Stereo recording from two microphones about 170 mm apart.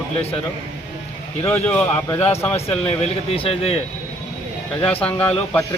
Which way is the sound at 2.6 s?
35° left (ahead or behind).